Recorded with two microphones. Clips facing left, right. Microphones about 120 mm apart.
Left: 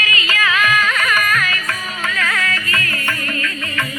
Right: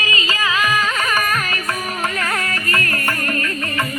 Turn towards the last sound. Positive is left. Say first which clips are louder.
# right 2 dB
turn(degrees=-40)  # may be behind; listen again after turning